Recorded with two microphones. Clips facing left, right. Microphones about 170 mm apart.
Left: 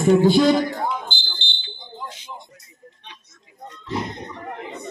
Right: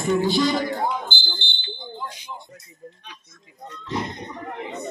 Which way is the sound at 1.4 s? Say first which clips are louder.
Even; 20° left (ahead or behind).